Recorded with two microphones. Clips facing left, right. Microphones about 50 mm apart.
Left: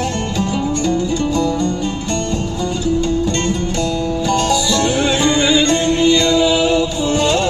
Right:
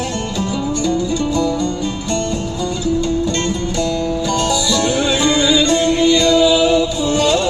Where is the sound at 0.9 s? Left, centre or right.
Left.